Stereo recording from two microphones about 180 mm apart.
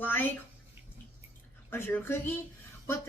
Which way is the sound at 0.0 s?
10° left (ahead or behind).